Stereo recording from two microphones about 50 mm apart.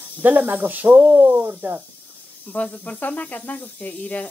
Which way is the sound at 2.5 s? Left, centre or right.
Left.